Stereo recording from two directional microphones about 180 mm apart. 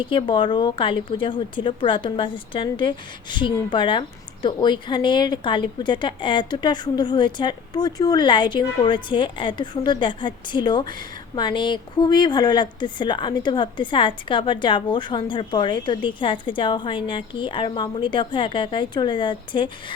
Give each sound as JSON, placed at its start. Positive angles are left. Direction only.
{"t": 0.0, "sound": "speech", "side_deg": 30}